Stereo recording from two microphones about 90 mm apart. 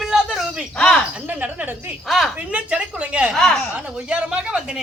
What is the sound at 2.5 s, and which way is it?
Speech, 15° right (ahead or behind).